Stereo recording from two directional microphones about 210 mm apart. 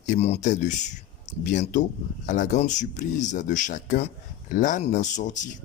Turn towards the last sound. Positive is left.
turn(degrees=35)  # may be behind; listen again after turning